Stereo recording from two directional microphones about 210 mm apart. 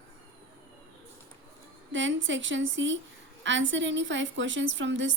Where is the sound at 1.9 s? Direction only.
60° right (ahead or behind).